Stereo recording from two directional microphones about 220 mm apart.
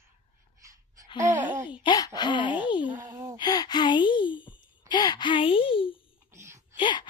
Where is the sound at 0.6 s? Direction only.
15° right (ahead or behind).